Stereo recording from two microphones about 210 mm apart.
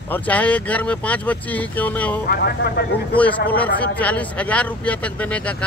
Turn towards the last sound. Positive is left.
turn(degrees=5)  # may be behind; listen again after turning